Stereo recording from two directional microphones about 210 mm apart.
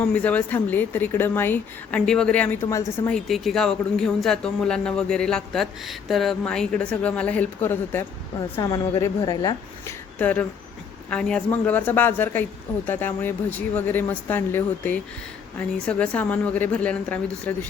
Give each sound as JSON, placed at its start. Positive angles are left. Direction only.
{"t": 0.0, "sound": "speech", "side_deg": 5}
{"t": 3.2, "sound": "a man's voice", "side_deg": 0}
{"t": 10.2, "sound": "speech", "side_deg": 5}